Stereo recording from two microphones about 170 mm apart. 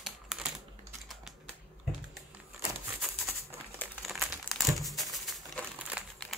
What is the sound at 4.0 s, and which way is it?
Crumpling, centre (ahead or behind).